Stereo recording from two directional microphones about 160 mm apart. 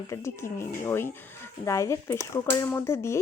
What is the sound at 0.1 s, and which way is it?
Speech, 15° left (ahead or behind).